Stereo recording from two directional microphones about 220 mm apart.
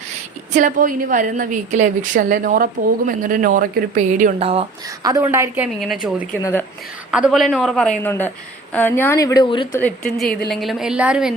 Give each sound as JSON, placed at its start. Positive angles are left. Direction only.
{"t": 0.5, "sound": "a woman's voice", "side_deg": -35}
{"t": 5.0, "sound": "a woman's voice", "side_deg": -15}
{"t": 6.4, "sound": "a woman's voice", "side_deg": 10}
{"t": 7.1, "sound": "a woman's voice", "side_deg": 0}
{"t": 9.7, "sound": "a woman's voice", "side_deg": 5}